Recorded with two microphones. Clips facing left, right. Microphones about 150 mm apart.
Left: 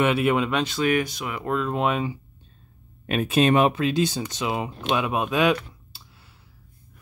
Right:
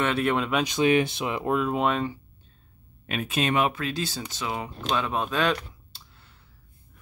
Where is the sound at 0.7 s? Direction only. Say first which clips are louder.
Right 1 dB; 20° right (ahead or behind).